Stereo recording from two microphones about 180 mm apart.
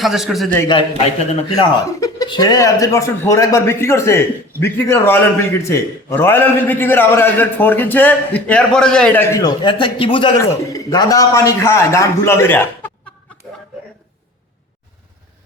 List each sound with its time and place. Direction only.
0.0 s a man's voice: centre (ahead or behind)
1.5 s a man's voice: 20° left (ahead or behind)